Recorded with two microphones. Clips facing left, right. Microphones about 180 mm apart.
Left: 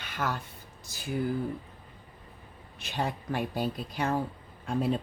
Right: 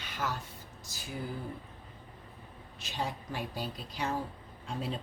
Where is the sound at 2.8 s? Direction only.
60° left (ahead or behind).